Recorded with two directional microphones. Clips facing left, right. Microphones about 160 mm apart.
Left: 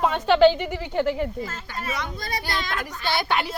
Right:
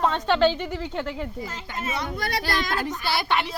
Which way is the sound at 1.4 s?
15° right (ahead or behind).